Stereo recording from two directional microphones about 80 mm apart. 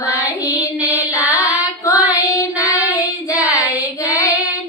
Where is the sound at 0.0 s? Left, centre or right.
Left.